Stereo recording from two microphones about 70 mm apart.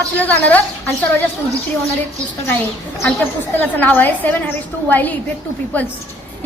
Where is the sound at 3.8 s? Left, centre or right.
Left.